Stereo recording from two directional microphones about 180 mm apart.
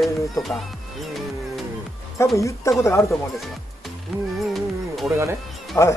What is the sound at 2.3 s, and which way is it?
Speech, 15° left (ahead or behind).